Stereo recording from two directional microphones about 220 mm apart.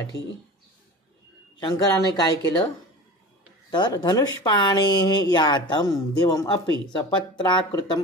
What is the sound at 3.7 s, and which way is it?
Speech, 20° left (ahead or behind).